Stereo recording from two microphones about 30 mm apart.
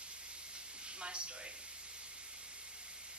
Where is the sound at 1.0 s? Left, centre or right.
Right.